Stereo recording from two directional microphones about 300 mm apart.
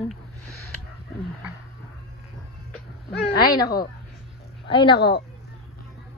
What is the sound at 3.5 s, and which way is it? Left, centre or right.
A woman's voice, centre.